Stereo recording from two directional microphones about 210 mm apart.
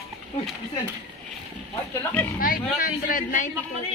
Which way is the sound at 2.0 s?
10° left (ahead or behind).